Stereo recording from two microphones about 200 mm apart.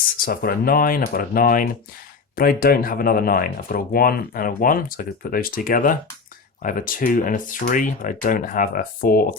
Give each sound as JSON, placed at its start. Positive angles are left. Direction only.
{"t": 0.3, "sound": "speech", "side_deg": 50}